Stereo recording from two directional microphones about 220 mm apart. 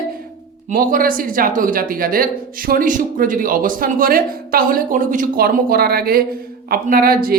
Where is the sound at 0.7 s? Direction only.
40° right (ahead or behind).